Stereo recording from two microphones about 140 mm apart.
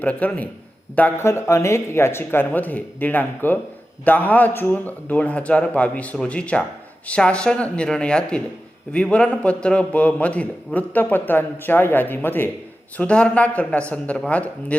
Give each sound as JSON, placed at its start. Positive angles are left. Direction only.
{"t": 0.0, "sound": "a man's voice", "side_deg": 10}